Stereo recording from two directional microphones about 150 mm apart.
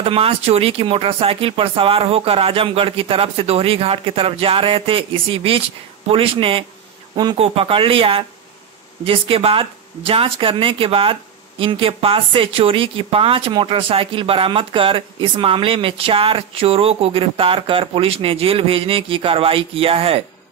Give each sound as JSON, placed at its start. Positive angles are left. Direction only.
{"t": 0.0, "sound": "speech", "side_deg": -40}